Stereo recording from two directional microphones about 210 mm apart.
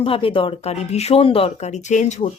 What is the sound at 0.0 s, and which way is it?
A woman's voice, 25° left (ahead or behind).